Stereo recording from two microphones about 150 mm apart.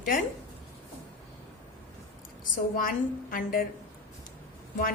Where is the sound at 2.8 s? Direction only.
65° left (ahead or behind).